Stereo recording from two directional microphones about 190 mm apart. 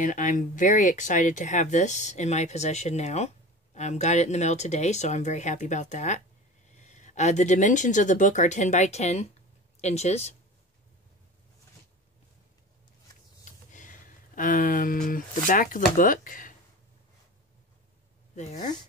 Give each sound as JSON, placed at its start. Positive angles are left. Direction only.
{"t": 0.0, "sound": "speech", "side_deg": 45}
{"t": 13.5, "sound": "speech", "side_deg": 40}
{"t": 18.3, "sound": "speech", "side_deg": 35}